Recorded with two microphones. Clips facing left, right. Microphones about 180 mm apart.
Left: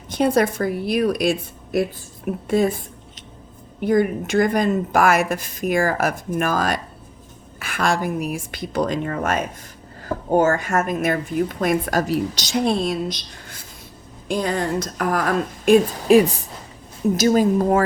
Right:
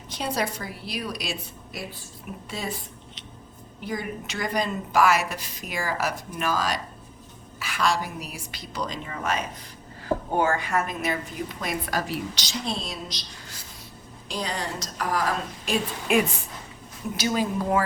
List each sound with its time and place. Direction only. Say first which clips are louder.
0.1 s a woman's voice: left 10 dB; 50° left (ahead or behind)
16.0 s a woman's voice: left 6 dB; 35° left (ahead or behind)